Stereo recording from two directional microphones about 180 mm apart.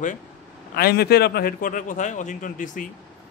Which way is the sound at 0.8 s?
60° left (ahead or behind).